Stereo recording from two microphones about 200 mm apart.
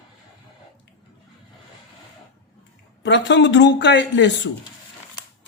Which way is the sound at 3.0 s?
65° left (ahead or behind).